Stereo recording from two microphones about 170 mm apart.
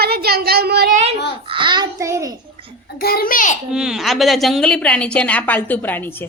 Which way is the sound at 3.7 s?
5° right (ahead or behind).